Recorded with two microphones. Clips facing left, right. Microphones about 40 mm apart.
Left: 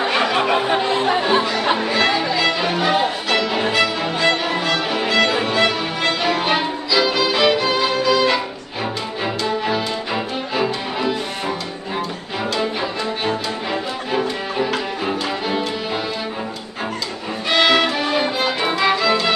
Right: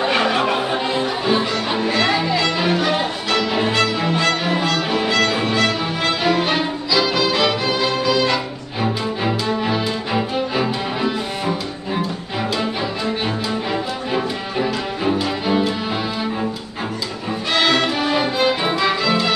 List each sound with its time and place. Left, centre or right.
0.0 s music: centre
0.9 s music: left
1.9 s music: centre
13.2 s music: centre
17.5 s music: centre